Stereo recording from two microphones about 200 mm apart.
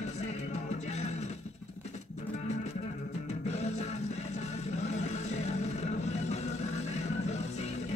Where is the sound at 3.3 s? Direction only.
35° left (ahead or behind).